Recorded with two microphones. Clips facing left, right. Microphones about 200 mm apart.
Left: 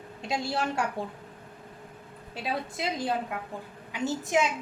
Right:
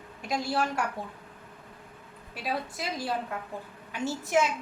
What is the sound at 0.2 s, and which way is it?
Speech, 25° left (ahead or behind).